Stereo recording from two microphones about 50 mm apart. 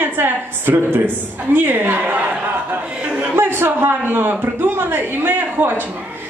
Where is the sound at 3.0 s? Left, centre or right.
Right.